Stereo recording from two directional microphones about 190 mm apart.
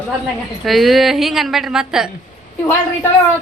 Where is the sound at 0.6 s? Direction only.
Centre (ahead or behind).